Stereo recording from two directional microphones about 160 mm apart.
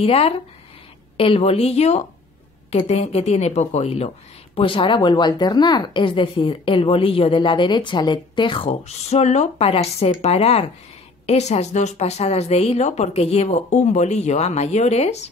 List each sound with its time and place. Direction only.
0.0 s a woman's voice: 40° left (ahead or behind)
8.6 s a woman's voice: 45° left (ahead or behind)